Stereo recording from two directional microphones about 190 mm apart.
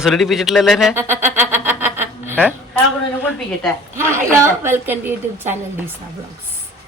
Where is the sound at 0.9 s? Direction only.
10° right (ahead or behind).